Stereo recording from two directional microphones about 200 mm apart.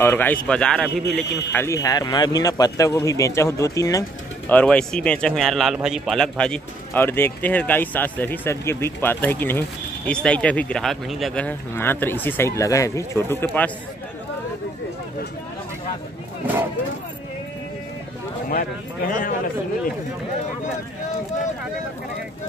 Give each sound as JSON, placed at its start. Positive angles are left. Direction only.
{"t": 0.0, "sound": "a man's voice", "side_deg": 10}
{"t": 18.5, "sound": "a man's voice", "side_deg": 45}